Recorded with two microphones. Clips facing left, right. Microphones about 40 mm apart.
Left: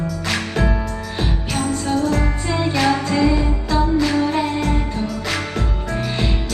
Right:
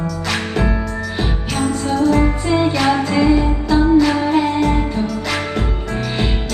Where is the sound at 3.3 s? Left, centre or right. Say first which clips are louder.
Right 4 dB; centre.